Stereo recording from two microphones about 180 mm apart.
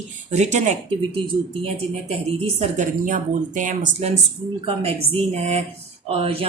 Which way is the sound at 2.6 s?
45° right (ahead or behind).